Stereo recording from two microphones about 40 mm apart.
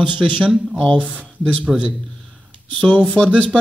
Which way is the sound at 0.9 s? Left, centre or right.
Right.